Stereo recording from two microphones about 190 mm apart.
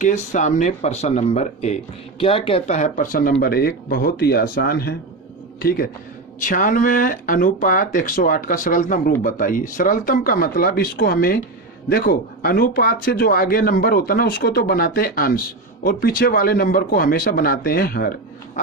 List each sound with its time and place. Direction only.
0.0 s speech: 40° left (ahead or behind)
18.6 s speech: 40° left (ahead or behind)